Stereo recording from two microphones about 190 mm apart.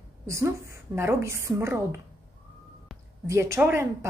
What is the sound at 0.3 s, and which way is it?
A woman's voice, 15° right (ahead or behind).